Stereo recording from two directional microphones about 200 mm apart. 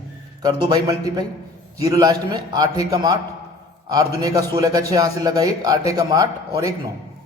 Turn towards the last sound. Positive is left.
turn(degrees=-15)  # may be behind; listen again after turning